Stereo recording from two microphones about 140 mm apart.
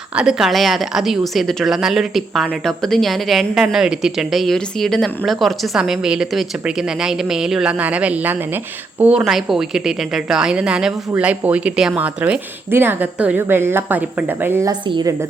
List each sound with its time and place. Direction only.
0.2 s a woman's voice: 5° right (ahead or behind)
14.7 s a woman's voice: 30° right (ahead or behind)